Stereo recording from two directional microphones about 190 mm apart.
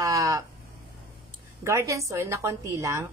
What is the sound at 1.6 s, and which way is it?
A woman's voice, 15° right (ahead or behind).